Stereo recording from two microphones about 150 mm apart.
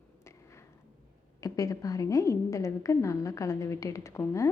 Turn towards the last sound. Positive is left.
turn(degrees=20)  # may be behind; listen again after turning